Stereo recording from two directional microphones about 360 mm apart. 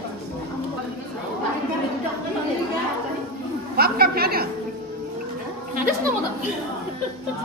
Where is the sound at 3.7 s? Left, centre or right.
Right.